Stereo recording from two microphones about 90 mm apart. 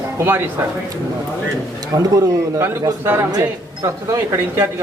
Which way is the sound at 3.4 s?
35° right (ahead or behind).